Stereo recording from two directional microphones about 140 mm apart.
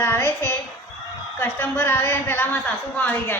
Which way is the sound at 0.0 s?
15° left (ahead or behind).